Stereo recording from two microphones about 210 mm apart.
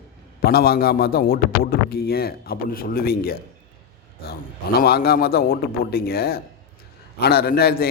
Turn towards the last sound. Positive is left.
turn(degrees=45)  # may be behind; listen again after turning